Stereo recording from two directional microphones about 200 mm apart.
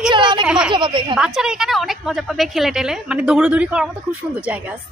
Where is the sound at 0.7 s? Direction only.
25° right (ahead or behind).